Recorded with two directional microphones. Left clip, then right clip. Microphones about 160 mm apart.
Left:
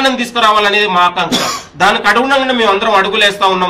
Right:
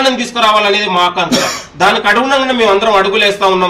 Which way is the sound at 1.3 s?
50° right (ahead or behind).